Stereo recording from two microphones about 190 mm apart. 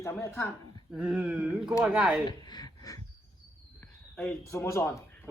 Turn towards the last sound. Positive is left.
turn(degrees=15)  # may be behind; listen again after turning